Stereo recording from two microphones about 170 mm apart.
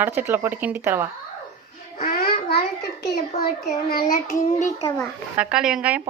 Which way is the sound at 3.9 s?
60° left (ahead or behind).